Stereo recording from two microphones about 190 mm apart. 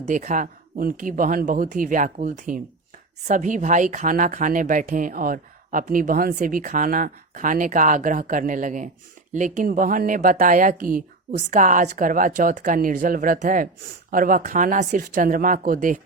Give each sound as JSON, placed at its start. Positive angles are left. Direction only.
{"t": 0.0, "sound": "speech", "side_deg": -40}